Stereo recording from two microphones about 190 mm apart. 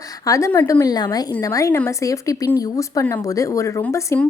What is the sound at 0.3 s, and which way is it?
A woman's voice, 15° left (ahead or behind).